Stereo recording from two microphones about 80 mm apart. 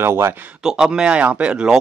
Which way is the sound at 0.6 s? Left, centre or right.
Centre.